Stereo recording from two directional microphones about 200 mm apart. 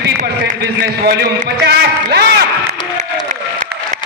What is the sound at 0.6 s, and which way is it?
A man's voice, 50° right (ahead or behind).